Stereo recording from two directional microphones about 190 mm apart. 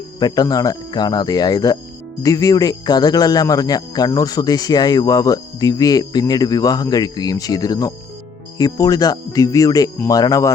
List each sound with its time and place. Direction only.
0.2 s speech: 20° left (ahead or behind)